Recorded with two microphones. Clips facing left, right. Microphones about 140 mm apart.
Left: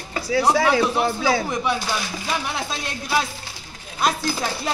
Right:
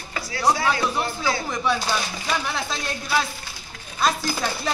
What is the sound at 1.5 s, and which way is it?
Chopping, 20° left (ahead or behind).